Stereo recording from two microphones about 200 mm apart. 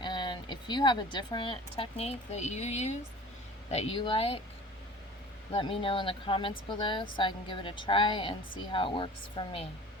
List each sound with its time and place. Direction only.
0.0 s speech: 20° left (ahead or behind)
5.5 s speech: 25° left (ahead or behind)